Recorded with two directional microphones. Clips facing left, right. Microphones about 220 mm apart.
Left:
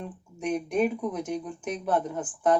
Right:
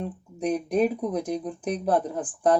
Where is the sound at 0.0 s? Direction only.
35° right (ahead or behind).